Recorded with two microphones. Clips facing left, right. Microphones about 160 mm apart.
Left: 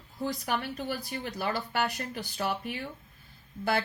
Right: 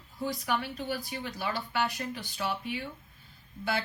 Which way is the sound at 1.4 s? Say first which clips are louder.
Left 1 dB; 50° left (ahead or behind).